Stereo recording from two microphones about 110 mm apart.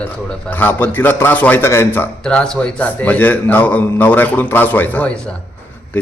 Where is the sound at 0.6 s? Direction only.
20° left (ahead or behind).